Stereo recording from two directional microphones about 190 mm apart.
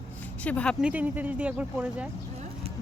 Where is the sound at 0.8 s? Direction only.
10° right (ahead or behind).